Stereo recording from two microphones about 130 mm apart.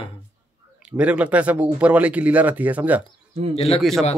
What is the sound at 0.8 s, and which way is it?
Speech, 10° right (ahead or behind).